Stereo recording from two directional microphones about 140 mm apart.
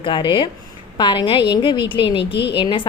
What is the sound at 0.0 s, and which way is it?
A woman's voice, 35° left (ahead or behind).